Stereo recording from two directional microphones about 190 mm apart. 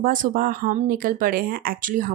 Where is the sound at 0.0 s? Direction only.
45° right (ahead or behind).